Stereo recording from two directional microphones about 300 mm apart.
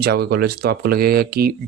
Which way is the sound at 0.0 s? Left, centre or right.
Right.